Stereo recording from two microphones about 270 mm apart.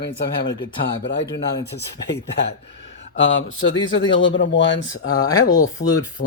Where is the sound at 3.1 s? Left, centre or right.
Left.